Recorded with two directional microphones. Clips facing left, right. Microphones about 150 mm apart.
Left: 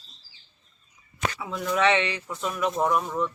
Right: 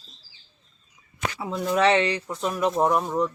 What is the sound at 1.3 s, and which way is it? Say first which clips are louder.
Speech: right 4 dB; 35° right (ahead or behind).